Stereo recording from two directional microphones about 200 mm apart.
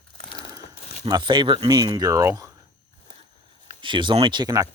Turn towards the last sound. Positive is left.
turn(degrees=-20)  # may be behind; listen again after turning